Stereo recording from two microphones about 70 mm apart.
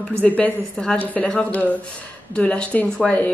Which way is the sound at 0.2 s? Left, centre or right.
Left.